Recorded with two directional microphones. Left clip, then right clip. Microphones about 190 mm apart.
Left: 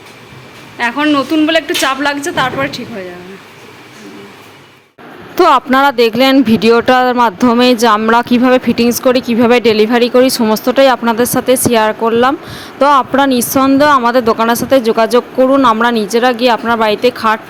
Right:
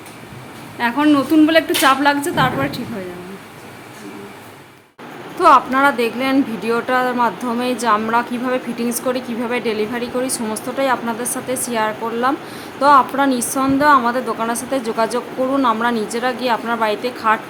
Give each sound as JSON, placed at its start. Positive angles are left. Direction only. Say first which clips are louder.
{"t": 0.8, "sound": "a woman's voice", "louder": "left 3 dB", "side_deg": 0}
{"t": 5.4, "sound": "speech", "louder": "left 3 dB", "side_deg": 50}